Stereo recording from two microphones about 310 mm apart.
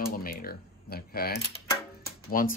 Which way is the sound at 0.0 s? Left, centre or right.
Left.